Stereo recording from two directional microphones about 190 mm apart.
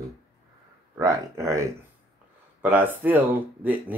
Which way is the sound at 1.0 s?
15° right (ahead or behind).